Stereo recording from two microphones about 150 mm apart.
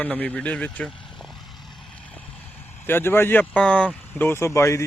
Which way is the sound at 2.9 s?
15° left (ahead or behind).